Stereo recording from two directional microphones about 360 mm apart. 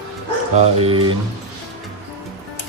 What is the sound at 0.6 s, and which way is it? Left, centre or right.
Speech, centre.